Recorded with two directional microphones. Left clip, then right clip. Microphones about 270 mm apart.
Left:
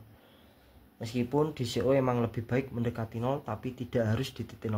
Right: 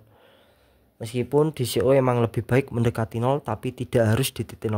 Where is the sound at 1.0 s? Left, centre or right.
Right.